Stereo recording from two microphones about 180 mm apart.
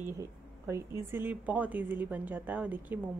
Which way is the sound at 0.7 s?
15° right (ahead or behind).